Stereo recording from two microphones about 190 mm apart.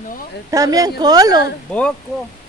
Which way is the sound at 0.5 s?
20° right (ahead or behind).